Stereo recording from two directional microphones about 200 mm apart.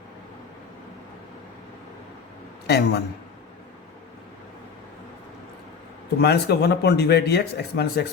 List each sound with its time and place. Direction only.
2.6 s speech: 55° left (ahead or behind)
6.1 s speech: 55° left (ahead or behind)